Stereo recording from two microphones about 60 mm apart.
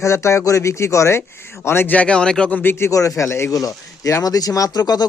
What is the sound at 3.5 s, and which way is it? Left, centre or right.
Speech, left.